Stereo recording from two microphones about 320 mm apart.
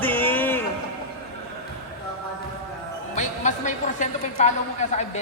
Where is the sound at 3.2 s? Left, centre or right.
Left.